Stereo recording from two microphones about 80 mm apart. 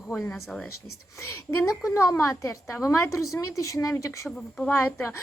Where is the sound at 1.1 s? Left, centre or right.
Left.